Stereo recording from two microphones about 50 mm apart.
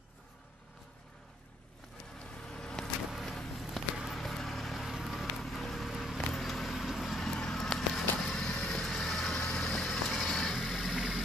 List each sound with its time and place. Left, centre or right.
2.1 s vehicle: centre
3.3 s a sound: centre
4.1 s vehicle: centre
10.5 s vehicle: centre